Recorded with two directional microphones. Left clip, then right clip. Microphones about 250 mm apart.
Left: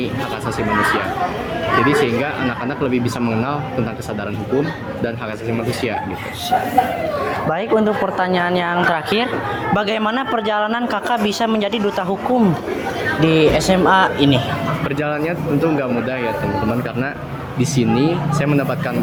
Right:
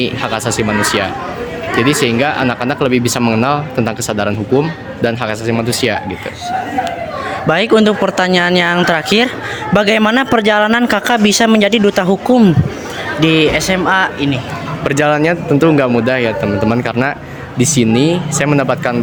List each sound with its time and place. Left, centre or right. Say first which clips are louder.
1.8 s speech: right 6 dB; right
5.0 s speech: right 9 dB; right
7.5 s a man's voice: right 8 dB; right
13.1 s speech: right 3 dB; centre
14.8 s speech: right 12 dB; right
17.6 s speech: right 5 dB; right